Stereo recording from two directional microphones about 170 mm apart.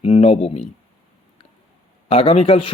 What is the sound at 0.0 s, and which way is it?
Speech, 35° left (ahead or behind).